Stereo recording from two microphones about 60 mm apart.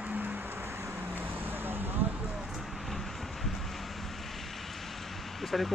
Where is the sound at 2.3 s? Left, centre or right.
Centre.